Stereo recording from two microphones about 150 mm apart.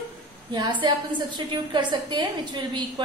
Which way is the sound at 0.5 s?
30° right (ahead or behind).